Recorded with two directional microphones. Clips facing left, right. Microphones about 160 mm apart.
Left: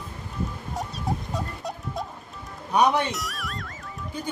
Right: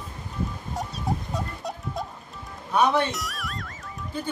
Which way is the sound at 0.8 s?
Centre (ahead or behind).